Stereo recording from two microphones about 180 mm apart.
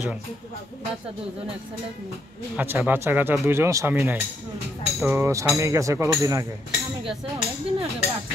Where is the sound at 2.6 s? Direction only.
10° right (ahead or behind).